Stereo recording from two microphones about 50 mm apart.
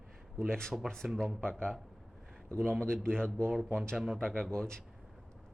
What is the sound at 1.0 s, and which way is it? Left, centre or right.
Speech, centre.